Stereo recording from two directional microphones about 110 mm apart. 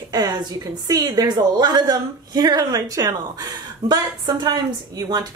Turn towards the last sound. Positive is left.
turn(degrees=-35)  # may be behind; listen again after turning